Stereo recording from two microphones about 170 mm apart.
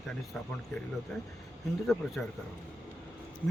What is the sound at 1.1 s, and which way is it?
Speech, 5° left (ahead or behind).